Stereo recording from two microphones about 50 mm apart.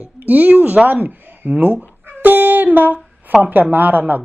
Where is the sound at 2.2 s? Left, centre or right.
Right.